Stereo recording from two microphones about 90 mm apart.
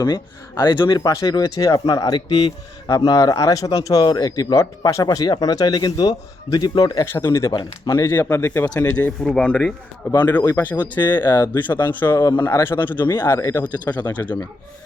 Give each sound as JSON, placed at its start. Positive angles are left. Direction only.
{"t": 0.0, "sound": "speech", "side_deg": 50}
{"t": 0.9, "sound": "speech", "side_deg": 45}
{"t": 5.0, "sound": "speech", "side_deg": 55}
{"t": 7.0, "sound": "speech", "side_deg": 25}
{"t": 9.2, "sound": "speech", "side_deg": 10}
{"t": 13.7, "sound": "speech", "side_deg": 15}